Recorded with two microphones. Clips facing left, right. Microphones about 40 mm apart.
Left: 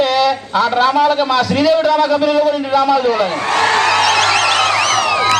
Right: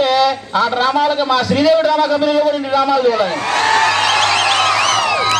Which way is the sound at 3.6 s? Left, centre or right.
Left.